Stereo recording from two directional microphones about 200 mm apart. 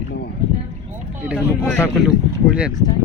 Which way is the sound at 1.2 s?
5° right (ahead or behind).